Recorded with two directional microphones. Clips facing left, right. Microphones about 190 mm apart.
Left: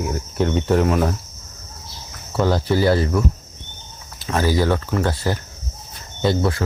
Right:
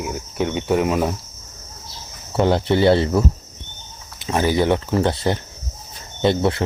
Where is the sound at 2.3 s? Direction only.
25° right (ahead or behind).